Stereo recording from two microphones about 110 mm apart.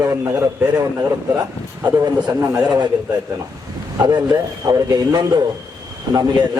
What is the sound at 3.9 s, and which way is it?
A man's voice, 40° right (ahead or behind).